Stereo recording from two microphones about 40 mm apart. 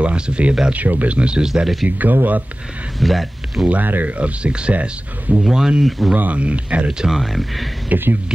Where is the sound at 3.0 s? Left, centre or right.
Centre.